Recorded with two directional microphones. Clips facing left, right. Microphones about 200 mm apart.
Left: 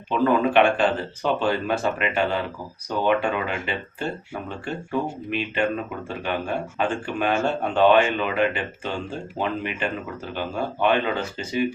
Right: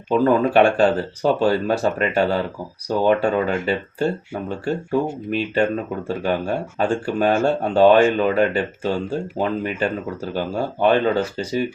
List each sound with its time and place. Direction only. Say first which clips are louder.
0.1 s speech: right 4 dB; 40° right (ahead or behind)